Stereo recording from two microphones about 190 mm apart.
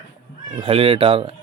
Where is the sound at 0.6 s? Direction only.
30° right (ahead or behind).